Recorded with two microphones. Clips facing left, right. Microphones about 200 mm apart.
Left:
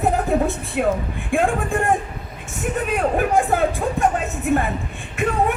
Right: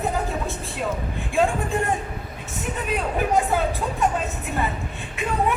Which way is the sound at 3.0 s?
50° left (ahead or behind).